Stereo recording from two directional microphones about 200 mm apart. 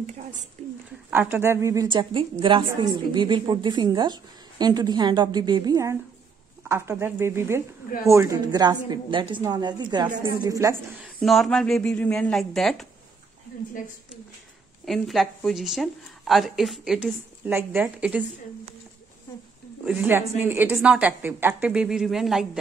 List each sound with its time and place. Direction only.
0.0 s a sound: 35° right (ahead or behind)
1.1 s a woman's voice: 10° right (ahead or behind)
11.1 s speech: centre (ahead or behind)
14.9 s speech: centre (ahead or behind)
19.8 s a woman's voice: 10° right (ahead or behind)